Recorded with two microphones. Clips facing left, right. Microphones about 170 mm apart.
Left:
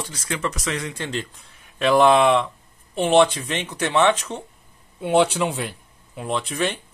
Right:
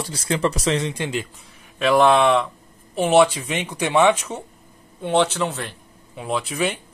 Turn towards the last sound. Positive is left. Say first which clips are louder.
# right 1 dB
turn(degrees=-10)  # may be behind; listen again after turning